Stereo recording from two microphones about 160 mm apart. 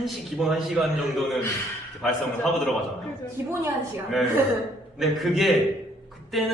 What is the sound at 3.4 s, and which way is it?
Speech, 15° right (ahead or behind).